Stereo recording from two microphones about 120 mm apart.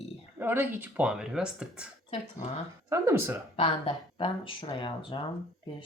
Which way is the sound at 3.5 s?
50° left (ahead or behind).